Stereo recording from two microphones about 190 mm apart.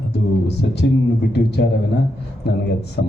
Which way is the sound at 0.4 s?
60° left (ahead or behind).